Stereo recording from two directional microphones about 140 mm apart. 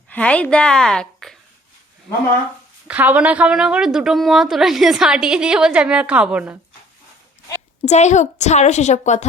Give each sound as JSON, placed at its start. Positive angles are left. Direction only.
{"t": 0.1, "sound": "speech", "side_deg": 10}
{"t": 2.8, "sound": "a woman's voice", "side_deg": -10}
{"t": 7.9, "sound": "a woman's voice", "side_deg": 55}